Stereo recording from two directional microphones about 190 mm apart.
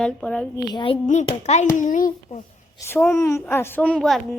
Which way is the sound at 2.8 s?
15° left (ahead or behind).